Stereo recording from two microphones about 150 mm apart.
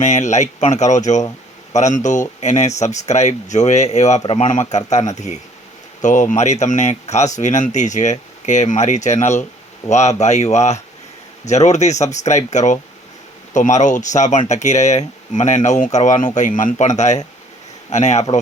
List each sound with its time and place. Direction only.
0.0 s speech: 50° left (ahead or behind)